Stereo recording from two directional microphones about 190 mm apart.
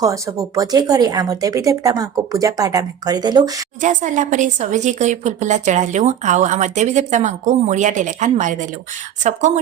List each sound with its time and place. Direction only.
0.0 s speech: 15° right (ahead or behind)
3.8 s a woman's voice: 40° right (ahead or behind)